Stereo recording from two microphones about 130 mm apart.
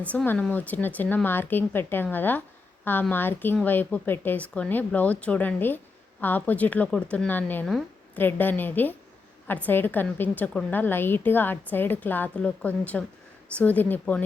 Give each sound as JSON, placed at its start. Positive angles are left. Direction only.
{"t": 0.0, "sound": "speech", "side_deg": 10}